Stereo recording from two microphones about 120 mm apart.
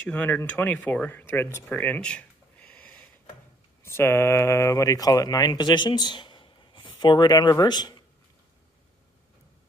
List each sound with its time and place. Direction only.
0.1 s speech: 15° left (ahead or behind)
3.8 s speech: 20° left (ahead or behind); by 8.0 s 35° left (ahead or behind)